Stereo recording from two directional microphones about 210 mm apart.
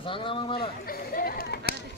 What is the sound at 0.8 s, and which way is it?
Chatter, 45° left (ahead or behind).